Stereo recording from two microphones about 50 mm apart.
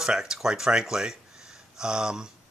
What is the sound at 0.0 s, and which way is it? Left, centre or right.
Speech, centre.